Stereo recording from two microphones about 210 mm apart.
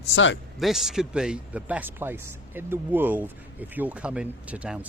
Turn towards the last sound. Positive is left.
turn(degrees=-5)  # may be behind; listen again after turning